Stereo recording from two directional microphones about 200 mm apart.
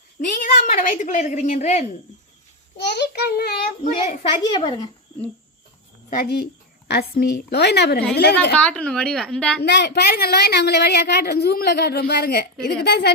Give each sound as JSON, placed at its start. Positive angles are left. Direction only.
{"t": 0.3, "sound": "a woman's voice", "side_deg": 40}
{"t": 2.7, "sound": "a woman's voice", "side_deg": 55}
{"t": 6.1, "sound": "a woman's voice", "side_deg": 50}
{"t": 8.5, "sound": "a woman's voice", "side_deg": 5}
{"t": 9.6, "sound": "a woman's voice", "side_deg": 55}